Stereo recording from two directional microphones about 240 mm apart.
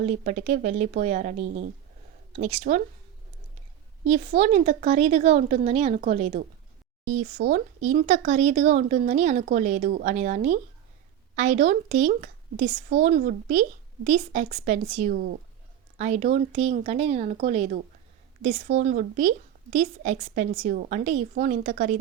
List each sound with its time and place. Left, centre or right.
0.0 s a woman's voice: right
4.0 s a woman's voice: right
18.8 s a woman's voice: right